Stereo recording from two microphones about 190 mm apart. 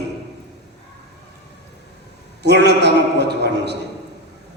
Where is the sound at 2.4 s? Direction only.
60° right (ahead or behind).